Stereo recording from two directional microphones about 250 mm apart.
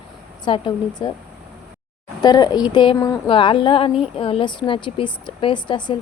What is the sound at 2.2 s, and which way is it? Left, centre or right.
Speech, centre.